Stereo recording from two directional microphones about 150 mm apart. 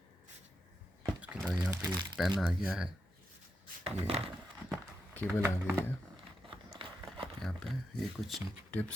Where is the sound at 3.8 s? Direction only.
40° right (ahead or behind).